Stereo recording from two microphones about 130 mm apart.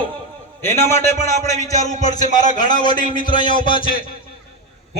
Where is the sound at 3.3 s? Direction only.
40° left (ahead or behind).